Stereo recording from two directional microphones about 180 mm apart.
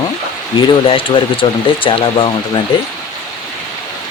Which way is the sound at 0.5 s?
30° left (ahead or behind).